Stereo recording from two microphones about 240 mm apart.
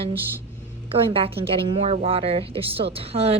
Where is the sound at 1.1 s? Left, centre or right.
Right.